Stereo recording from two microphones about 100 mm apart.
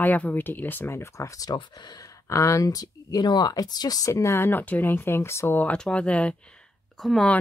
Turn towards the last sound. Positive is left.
turn(degrees=5)  # may be behind; listen again after turning